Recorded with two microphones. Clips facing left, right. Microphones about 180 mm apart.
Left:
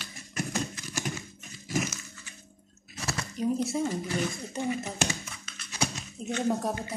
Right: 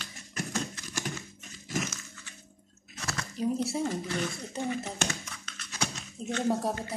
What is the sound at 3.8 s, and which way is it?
Speech, 10° left (ahead or behind).